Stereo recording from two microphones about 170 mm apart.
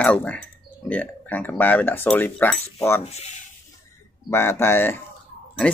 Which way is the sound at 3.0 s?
40° left (ahead or behind).